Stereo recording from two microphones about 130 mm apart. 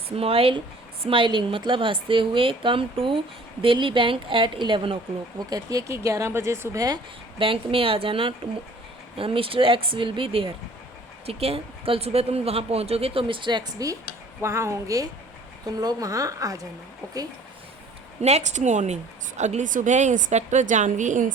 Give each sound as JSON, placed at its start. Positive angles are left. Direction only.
{"t": 0.2, "sound": "a woman's voice", "side_deg": -45}
{"t": 5.5, "sound": "speech", "side_deg": -30}
{"t": 7.3, "sound": "a woman's voice", "side_deg": -45}
{"t": 18.2, "sound": "a woman's voice", "side_deg": -60}